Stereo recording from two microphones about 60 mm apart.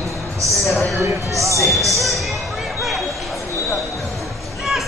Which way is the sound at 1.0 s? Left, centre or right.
Right.